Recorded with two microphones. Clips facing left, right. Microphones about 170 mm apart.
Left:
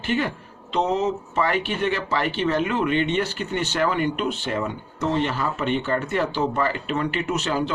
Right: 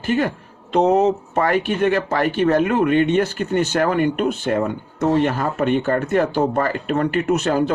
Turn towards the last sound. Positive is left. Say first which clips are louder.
# right 6 dB
turn(degrees=-50)  # may be behind; listen again after turning